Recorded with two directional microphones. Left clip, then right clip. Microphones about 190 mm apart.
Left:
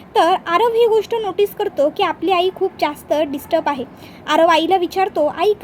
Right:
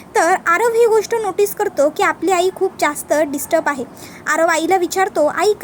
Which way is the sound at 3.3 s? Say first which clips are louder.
Right 1 dB; 5° right (ahead or behind).